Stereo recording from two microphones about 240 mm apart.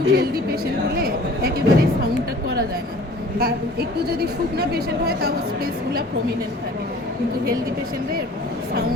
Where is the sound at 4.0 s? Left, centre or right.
Right.